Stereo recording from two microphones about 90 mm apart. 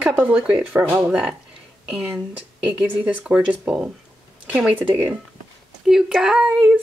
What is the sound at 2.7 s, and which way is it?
Speech, 20° right (ahead or behind).